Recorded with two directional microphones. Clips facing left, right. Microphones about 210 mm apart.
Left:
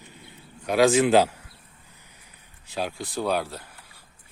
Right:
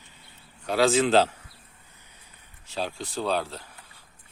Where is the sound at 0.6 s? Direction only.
15° left (ahead or behind).